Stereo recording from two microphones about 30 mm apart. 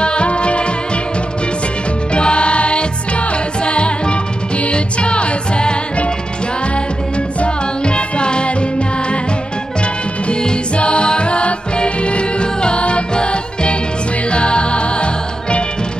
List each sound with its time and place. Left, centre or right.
0.0 s music: left
2.1 s music: left
7.3 s music: left
10.2 s music: left